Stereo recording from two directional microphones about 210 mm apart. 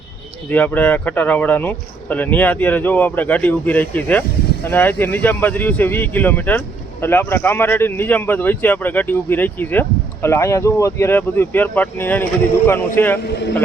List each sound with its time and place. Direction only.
0.5 s speech: 5° left (ahead or behind)